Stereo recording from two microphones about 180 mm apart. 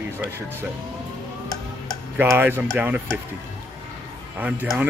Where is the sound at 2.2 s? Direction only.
10° right (ahead or behind).